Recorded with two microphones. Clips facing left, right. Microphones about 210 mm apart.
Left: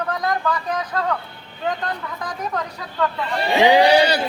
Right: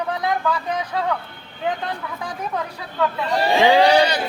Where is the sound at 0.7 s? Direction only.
10° right (ahead or behind).